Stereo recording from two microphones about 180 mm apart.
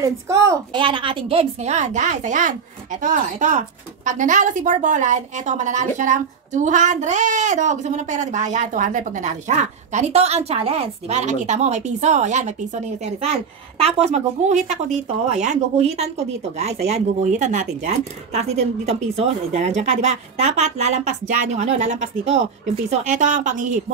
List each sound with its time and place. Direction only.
0.0 s a woman's voice: 15° right (ahead or behind)
0.7 s speech: 30° right (ahead or behind)
13.7 s speech: 35° right (ahead or behind)